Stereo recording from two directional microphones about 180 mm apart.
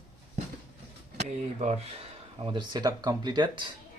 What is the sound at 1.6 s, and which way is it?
Speech, 35° right (ahead or behind).